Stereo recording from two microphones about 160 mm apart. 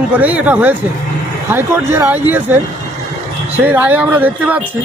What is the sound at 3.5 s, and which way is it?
Speech, 10° right (ahead or behind).